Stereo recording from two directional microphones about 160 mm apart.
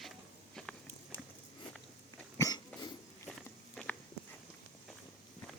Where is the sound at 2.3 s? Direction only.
25° left (ahead or behind).